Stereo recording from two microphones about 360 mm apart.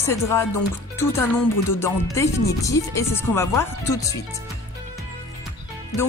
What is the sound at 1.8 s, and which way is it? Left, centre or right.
Speech, centre.